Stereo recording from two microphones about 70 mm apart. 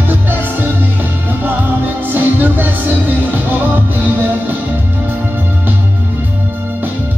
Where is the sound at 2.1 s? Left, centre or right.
Right.